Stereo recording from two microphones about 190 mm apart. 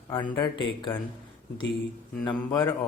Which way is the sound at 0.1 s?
20° left (ahead or behind).